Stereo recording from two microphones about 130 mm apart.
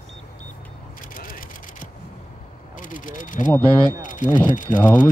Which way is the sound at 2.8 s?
90° left.